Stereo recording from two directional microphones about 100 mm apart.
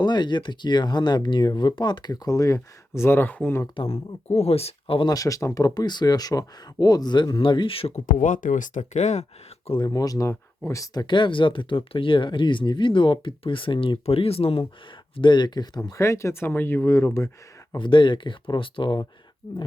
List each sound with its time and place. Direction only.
0.0 s speech: 50° left (ahead or behind); by 3.6 s 15° left (ahead or behind)
3.8 s speech: 80° left
5.0 s speech: 35° left (ahead or behind); by 7.9 s 70° left (ahead or behind)
8.7 s speech: 90° left
9.8 s speech: 40° left (ahead or behind)
11.0 s speech: 55° left (ahead or behind); by 14.6 s 75° left (ahead or behind)
15.1 s speech: 55° left (ahead or behind)
15.9 s speech: 30° left (ahead or behind)
17.7 s speech: 55° left (ahead or behind)